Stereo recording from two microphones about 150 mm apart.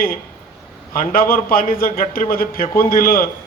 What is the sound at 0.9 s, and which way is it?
Speech, 75° left (ahead or behind).